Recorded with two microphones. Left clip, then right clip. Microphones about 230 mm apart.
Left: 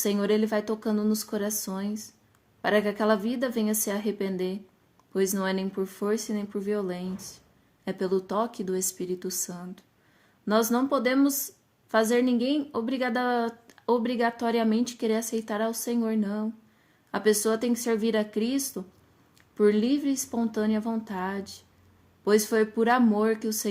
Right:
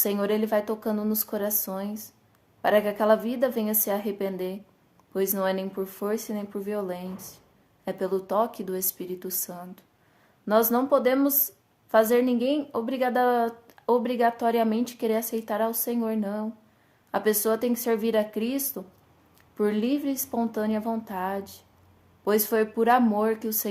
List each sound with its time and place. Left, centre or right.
0.0 s a woman's voice: left